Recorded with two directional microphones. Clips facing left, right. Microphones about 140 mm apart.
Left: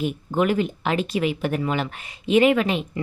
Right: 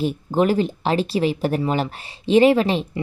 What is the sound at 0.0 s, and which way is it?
Speech, 35° right (ahead or behind).